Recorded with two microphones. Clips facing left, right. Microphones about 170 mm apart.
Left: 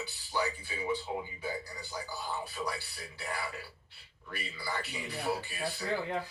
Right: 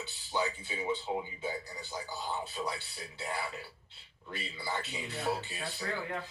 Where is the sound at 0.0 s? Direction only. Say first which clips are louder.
Even; 20° right (ahead or behind).